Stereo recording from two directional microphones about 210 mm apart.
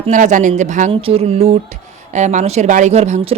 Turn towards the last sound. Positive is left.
turn(degrees=-35)  # may be behind; listen again after turning